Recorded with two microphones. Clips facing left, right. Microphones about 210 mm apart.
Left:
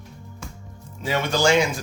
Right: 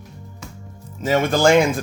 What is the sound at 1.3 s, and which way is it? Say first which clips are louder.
Speech: right 4 dB; 50° right (ahead or behind).